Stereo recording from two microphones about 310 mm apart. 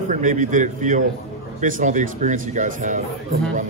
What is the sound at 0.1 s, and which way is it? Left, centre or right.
Speech, right.